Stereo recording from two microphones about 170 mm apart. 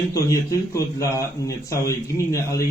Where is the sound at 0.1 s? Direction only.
20° left (ahead or behind).